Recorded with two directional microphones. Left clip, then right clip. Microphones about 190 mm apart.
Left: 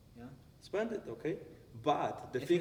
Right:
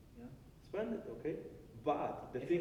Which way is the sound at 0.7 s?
35° left (ahead or behind).